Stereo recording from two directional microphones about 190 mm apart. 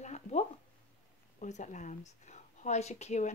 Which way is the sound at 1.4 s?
40° left (ahead or behind).